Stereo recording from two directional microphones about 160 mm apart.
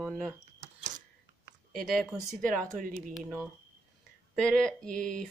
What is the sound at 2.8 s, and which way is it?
Speech, 55° right (ahead or behind).